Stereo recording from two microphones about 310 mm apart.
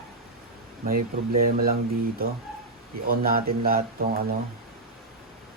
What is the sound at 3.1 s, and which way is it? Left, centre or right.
Speech, right.